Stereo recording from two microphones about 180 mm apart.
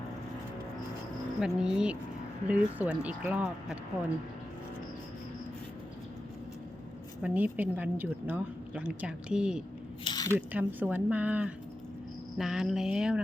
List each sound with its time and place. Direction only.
1.4 s a woman's voice: 5° right (ahead or behind)
7.2 s a woman's voice: 10° right (ahead or behind)
10.0 s a sound: 25° left (ahead or behind)
10.3 s a woman's voice: 10° right (ahead or behind)